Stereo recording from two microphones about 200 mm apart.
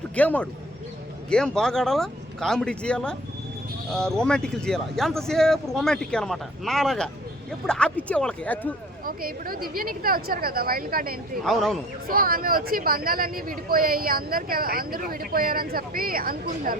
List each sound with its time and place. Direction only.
0.2 s speech: 5° left (ahead or behind)
9.0 s speech: 45° right (ahead or behind)
11.4 s speech: centre (ahead or behind)
12.0 s speech: 45° right (ahead or behind)